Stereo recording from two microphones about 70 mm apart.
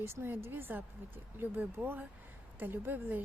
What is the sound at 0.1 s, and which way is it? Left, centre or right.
Speech, right.